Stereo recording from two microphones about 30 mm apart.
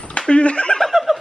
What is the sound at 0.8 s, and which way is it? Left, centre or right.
Snicker, centre.